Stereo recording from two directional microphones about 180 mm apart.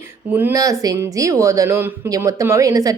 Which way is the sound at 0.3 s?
10° right (ahead or behind).